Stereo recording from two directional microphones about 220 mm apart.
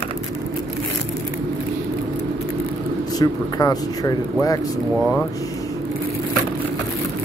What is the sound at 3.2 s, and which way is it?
Speech, 15° left (ahead or behind).